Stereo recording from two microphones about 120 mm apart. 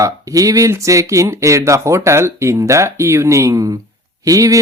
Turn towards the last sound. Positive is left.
turn(degrees=-30)  # may be behind; listen again after turning